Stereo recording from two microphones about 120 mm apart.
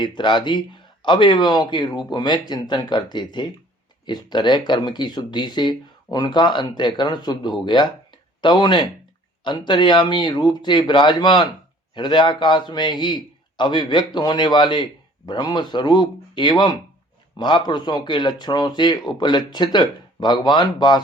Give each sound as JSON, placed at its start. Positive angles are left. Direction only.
{"t": 0.0, "sound": "speech", "side_deg": 40}